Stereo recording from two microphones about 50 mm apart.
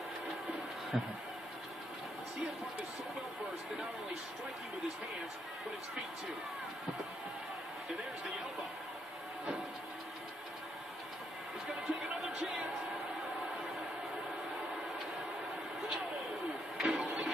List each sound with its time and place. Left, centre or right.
0.9 s speech: centre
11.6 s music: centre
16.8 s printer: centre